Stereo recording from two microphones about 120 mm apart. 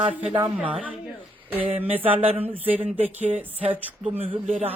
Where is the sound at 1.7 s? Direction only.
50° right (ahead or behind).